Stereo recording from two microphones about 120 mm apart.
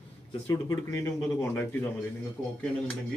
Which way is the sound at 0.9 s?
25° left (ahead or behind).